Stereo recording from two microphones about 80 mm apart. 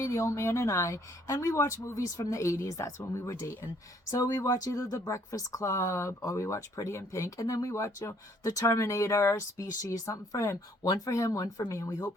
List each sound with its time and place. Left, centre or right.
0.0 s speech: left